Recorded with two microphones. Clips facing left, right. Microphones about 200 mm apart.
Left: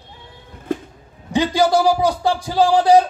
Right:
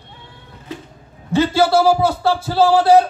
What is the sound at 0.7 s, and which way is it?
Music, 50° left (ahead or behind).